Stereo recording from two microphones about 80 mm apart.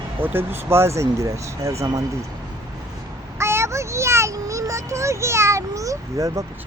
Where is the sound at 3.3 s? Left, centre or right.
Right.